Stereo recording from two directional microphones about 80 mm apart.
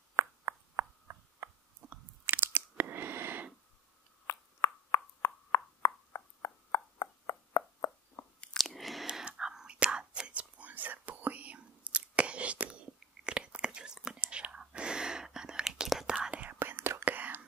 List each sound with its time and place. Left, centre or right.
0.1 s a sound: right
1.8 s chewing: centre
2.2 s crunch: right
4.3 s a sound: left
8.4 s chewing: centre
9.0 s whispering: centre
16.2 s whispering: centre
16.5 s whispering: right
17.0 s whispering: right